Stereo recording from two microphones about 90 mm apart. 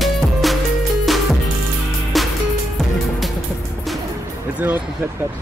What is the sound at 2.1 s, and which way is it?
Music, centre (ahead or behind).